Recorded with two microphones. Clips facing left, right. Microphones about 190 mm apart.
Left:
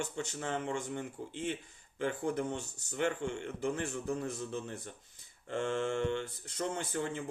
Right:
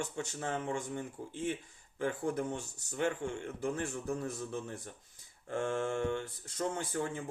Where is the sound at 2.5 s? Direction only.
40° right (ahead or behind).